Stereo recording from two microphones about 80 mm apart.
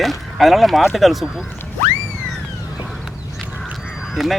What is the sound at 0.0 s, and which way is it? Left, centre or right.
Speech, centre.